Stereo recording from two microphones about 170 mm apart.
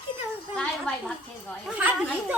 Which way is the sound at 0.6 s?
5° left (ahead or behind).